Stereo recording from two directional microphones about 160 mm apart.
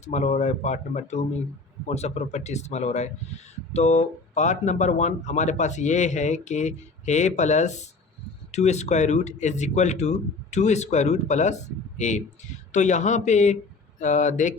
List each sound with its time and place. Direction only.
0.0 s speech: 45° left (ahead or behind)